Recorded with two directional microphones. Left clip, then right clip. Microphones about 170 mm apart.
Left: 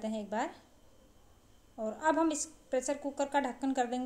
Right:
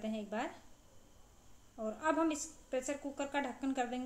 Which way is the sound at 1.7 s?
35° left (ahead or behind).